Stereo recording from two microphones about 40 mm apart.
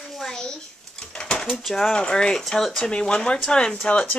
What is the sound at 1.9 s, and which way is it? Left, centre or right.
Speech, left.